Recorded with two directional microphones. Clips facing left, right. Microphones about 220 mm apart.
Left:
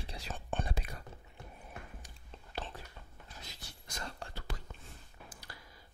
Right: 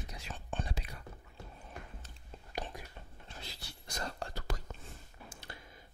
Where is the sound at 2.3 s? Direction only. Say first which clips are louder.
Right 2 dB; 15° right (ahead or behind).